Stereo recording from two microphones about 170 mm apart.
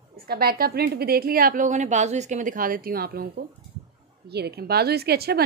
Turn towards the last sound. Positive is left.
turn(degrees=-65)  # may be behind; listen again after turning